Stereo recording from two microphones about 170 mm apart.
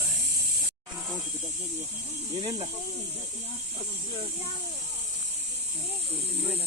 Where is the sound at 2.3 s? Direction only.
35° right (ahead or behind).